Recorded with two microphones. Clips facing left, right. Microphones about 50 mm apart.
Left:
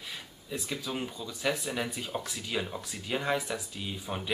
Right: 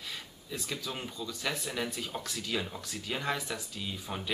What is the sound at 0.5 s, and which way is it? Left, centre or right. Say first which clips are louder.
Speech: left 3 dB; centre.